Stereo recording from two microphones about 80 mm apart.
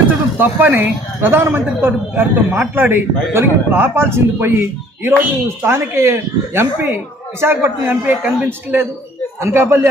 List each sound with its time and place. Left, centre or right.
0.3 s a man's voice: right